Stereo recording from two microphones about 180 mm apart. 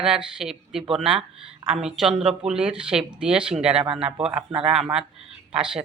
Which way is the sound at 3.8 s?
30° right (ahead or behind).